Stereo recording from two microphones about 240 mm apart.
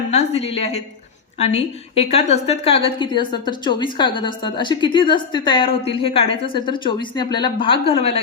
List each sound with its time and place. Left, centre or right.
0.1 s a woman's voice: left